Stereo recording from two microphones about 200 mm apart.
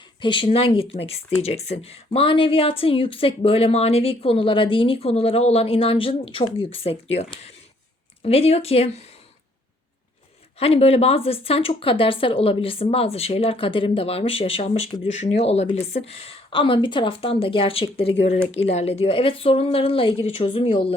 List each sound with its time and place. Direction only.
0.2 s speech: 25° left (ahead or behind)
10.6 s speech: 30° left (ahead or behind)